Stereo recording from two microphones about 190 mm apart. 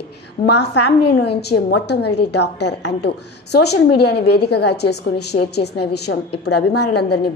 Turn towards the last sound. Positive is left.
turn(degrees=60)  # may be behind; listen again after turning